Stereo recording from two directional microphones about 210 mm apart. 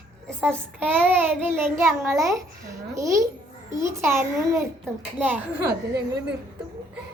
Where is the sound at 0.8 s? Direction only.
10° right (ahead or behind).